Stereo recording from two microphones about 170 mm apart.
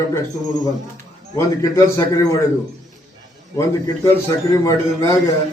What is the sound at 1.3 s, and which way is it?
A man's voice, 20° left (ahead or behind).